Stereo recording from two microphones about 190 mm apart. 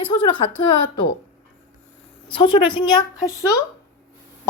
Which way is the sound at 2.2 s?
25° left (ahead or behind).